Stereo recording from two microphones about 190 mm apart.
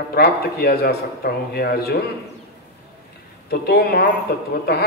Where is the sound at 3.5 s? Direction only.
55° left (ahead or behind).